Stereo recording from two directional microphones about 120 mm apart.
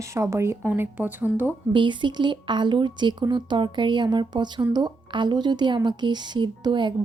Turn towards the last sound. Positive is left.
turn(degrees=-40)  # may be behind; listen again after turning